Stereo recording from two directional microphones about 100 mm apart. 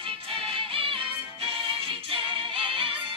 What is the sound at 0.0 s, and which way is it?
Music, 65° right (ahead or behind).